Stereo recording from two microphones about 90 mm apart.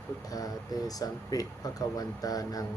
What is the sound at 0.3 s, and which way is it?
Speech, 45° left (ahead or behind).